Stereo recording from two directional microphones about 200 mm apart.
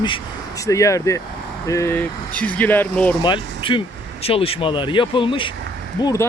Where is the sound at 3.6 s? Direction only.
25° left (ahead or behind).